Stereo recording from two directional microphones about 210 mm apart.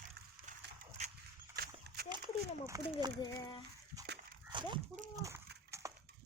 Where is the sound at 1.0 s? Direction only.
30° right (ahead or behind).